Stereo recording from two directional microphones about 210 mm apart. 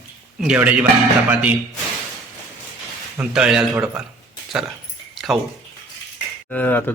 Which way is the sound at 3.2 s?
5° right (ahead or behind).